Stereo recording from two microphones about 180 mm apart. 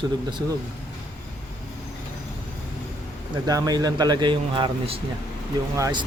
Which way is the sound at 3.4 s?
20° right (ahead or behind).